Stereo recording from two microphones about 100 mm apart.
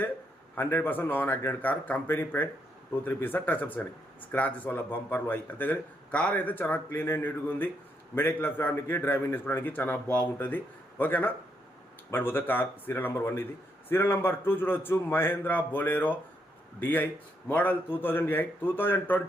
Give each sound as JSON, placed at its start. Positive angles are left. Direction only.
{"t": 0.5, "sound": "a man's voice", "side_deg": 20}